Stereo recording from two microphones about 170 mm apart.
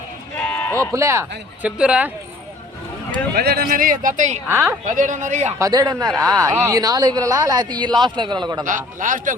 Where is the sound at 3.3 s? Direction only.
65° right (ahead or behind); by 4.4 s 45° right (ahead or behind).